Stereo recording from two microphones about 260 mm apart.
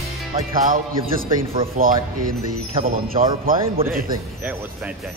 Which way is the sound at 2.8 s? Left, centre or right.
Right.